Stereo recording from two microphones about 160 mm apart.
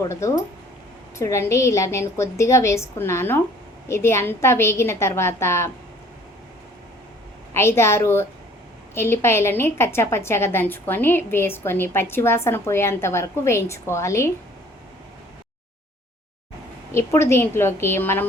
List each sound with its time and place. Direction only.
0.0 s a woman's voice: 20° left (ahead or behind)
7.5 s a woman's voice: 15° left (ahead or behind)
16.9 s a woman's voice: 15° left (ahead or behind)